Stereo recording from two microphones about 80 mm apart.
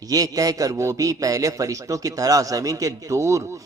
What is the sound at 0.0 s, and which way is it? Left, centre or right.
A man's voice, right.